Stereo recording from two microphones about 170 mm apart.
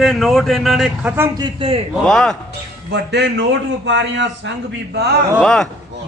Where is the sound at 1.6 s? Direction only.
35° right (ahead or behind).